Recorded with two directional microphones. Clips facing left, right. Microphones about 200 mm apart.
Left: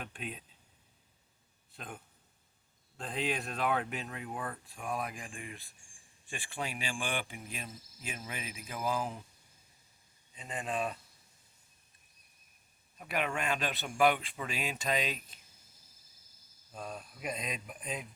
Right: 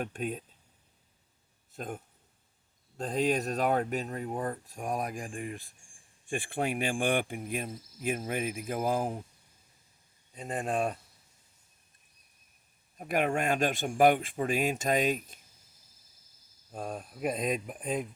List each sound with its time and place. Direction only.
0.0 s speech: 45° right (ahead or behind)
1.7 s a man's voice: 45° right (ahead or behind)
3.0 s speech: 40° right (ahead or behind)
10.3 s speech: 50° right (ahead or behind)
13.0 s speech: 45° right (ahead or behind)
16.7 s speech: 50° right (ahead or behind)